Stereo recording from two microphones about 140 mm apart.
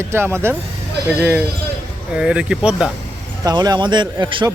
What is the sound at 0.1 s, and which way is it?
Speech, 15° right (ahead or behind).